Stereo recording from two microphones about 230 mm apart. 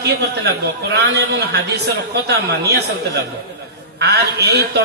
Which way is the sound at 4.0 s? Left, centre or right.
Right.